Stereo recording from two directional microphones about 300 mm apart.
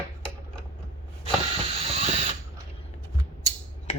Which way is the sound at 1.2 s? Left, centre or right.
Centre.